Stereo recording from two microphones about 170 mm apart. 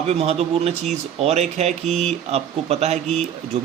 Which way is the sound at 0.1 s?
35° right (ahead or behind).